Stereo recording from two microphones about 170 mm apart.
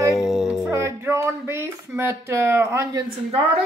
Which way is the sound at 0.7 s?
15° right (ahead or behind).